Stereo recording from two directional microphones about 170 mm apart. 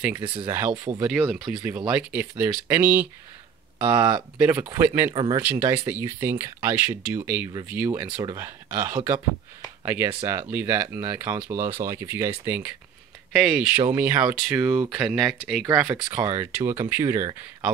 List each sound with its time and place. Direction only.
0.1 s speech: 30° right (ahead or behind)
0.5 s speech: 15° right (ahead or behind)
4.4 s speech: 10° right (ahead or behind)
5.1 s speech: 25° right (ahead or behind)
5.4 s speech: 10° right (ahead or behind)
15.9 s speech: 20° right (ahead or behind)